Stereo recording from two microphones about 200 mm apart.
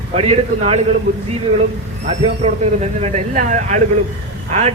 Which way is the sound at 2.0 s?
30° right (ahead or behind).